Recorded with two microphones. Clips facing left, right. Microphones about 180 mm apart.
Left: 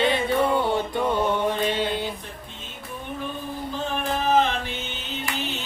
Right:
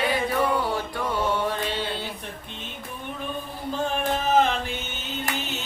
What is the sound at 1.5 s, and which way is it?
Mantra, 15° left (ahead or behind).